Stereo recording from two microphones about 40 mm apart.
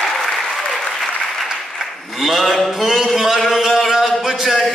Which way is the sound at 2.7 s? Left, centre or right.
Centre.